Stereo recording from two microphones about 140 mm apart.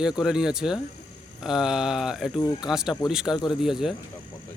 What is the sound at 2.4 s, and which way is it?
Speech, 30° left (ahead or behind).